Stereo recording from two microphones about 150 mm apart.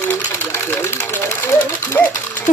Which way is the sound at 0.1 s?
15° left (ahead or behind).